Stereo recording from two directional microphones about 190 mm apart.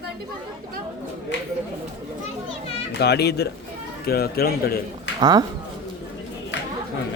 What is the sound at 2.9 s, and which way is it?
A man's voice, 60° left (ahead or behind).